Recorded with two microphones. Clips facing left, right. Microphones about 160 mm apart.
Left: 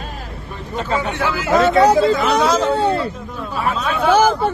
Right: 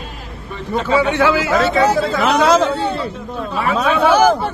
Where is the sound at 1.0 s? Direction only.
90° right.